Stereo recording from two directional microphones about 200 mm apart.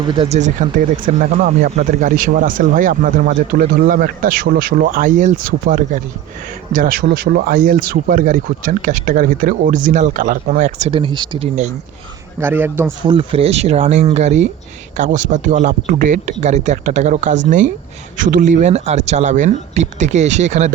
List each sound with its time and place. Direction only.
0.0 s speech: 25° right (ahead or behind)
12.4 s a man's voice: 10° right (ahead or behind)
13.1 s speech: 25° right (ahead or behind)